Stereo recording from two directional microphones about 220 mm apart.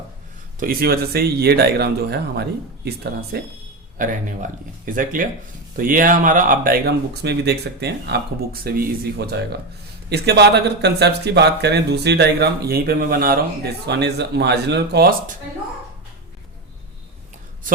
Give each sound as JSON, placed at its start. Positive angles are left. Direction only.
{"t": 0.6, "sound": "speech", "side_deg": -45}
{"t": 3.9, "sound": "speech", "side_deg": -35}